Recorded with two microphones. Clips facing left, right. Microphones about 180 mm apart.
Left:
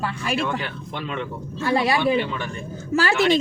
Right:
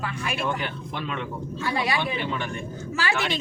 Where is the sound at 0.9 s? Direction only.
Centre (ahead or behind).